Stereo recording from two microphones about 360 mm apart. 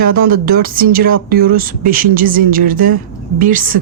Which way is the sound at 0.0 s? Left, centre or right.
Right.